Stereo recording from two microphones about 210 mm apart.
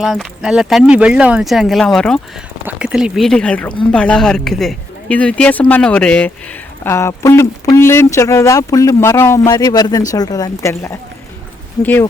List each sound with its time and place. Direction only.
0.0 s speech: centre (ahead or behind)